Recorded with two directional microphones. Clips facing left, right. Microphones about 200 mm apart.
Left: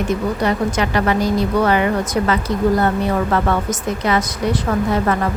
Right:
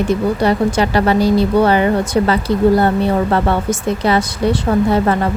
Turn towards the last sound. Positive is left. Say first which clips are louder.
# right 4 dB
turn(degrees=-30)  # may be behind; listen again after turning